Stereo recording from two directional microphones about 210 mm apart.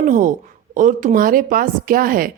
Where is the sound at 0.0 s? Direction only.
35° right (ahead or behind).